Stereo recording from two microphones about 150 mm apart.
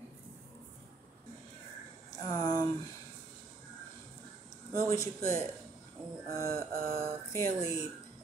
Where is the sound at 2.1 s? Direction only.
30° left (ahead or behind).